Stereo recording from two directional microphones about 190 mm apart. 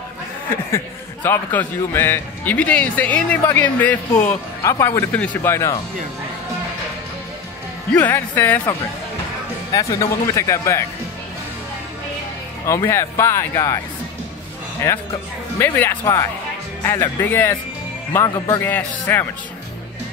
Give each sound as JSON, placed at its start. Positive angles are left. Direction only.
{"t": 0.5, "sound": "a man's voice", "side_deg": 10}
{"t": 7.9, "sound": "a man's voice", "side_deg": 10}
{"t": 9.7, "sound": "a man's voice", "side_deg": 20}
{"t": 12.6, "sound": "a man's voice", "side_deg": 15}
{"t": 14.8, "sound": "a man's voice", "side_deg": 15}